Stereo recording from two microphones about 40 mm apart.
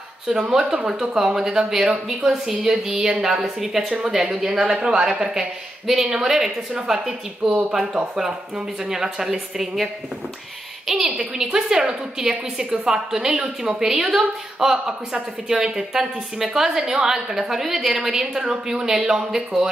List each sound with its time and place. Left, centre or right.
0.5 s a woman's voice: centre
8.8 s a woman's voice: centre
11.1 s a woman's voice: centre